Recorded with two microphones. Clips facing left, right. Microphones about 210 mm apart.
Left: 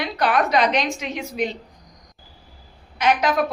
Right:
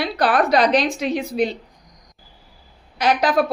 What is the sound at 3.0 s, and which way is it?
Speech, 35° right (ahead or behind).